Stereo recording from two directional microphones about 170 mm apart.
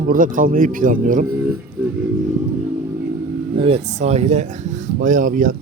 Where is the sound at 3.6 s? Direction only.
35° right (ahead or behind).